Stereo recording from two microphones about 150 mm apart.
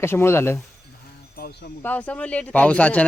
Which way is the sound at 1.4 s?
90° left.